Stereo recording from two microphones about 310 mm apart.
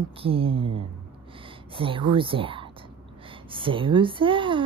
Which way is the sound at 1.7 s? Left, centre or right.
Centre.